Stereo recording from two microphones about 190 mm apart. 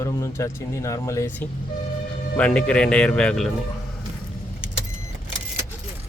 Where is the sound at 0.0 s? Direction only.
15° left (ahead or behind).